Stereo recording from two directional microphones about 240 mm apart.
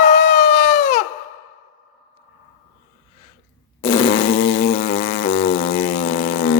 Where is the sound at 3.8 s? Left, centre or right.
Centre.